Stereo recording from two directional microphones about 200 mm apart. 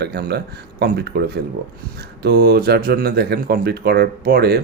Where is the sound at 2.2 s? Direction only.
55° right (ahead or behind).